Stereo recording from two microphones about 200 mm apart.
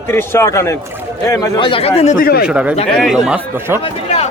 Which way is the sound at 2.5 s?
5° right (ahead or behind).